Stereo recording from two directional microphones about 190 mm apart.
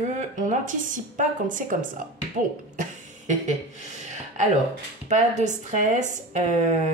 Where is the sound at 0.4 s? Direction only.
40° right (ahead or behind).